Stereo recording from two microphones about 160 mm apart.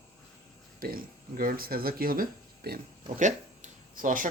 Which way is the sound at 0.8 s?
65° right (ahead or behind).